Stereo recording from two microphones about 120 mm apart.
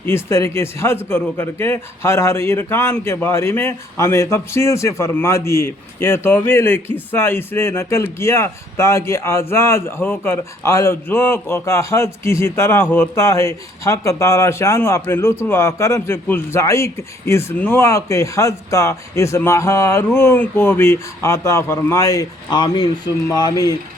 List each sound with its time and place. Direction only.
0.0 s a man's voice: 20° left (ahead or behind)
17.8 s a man's voice: 25° left (ahead or behind)